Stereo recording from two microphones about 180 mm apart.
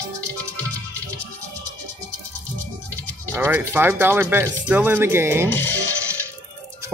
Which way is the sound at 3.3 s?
15° right (ahead or behind).